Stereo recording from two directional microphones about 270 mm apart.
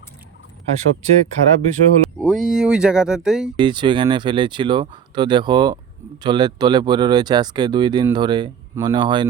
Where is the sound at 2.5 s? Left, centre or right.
Centre.